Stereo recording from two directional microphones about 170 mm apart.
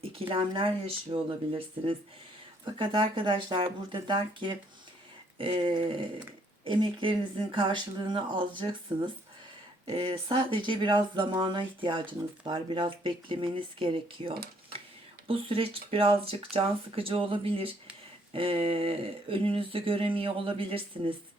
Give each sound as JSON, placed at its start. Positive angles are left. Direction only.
{"t": 0.0, "sound": "speech", "side_deg": -35}